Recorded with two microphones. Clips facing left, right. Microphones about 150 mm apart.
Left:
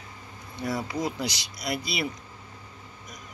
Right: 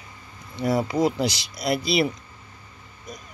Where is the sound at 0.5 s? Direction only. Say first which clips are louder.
Right 7 dB; 25° right (ahead or behind).